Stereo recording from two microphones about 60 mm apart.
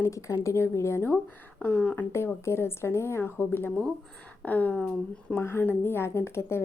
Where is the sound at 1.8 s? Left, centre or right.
Left.